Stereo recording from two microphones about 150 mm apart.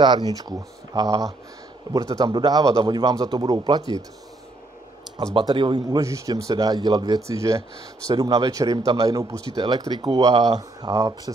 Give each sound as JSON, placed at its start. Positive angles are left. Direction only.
{"t": 0.0, "sound": "speech", "side_deg": -30}
{"t": 5.1, "sound": "speech", "side_deg": -30}